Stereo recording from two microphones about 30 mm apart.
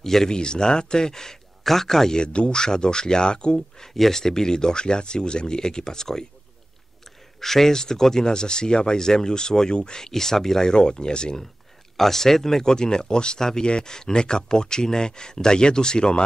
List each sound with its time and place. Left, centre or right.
0.0 s speech: centre
0.3 s speech: left
2.1 s speech: left
2.5 s speech: left
3.5 s speech: centre
7.3 s speech: centre; by 10.0 s left
10.0 s speech: centre
10.7 s speech: left
12.0 s speech: centre; by 16.3 s left